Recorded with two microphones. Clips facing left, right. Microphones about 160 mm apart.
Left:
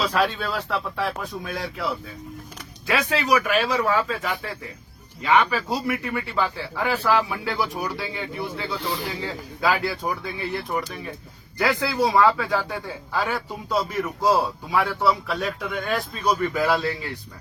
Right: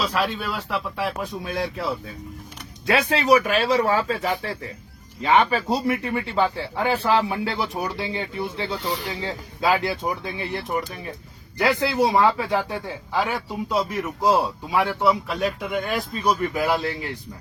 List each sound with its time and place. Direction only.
0.1 s speech: 5° right (ahead or behind)
1.5 s a man's voice: 30° right (ahead or behind)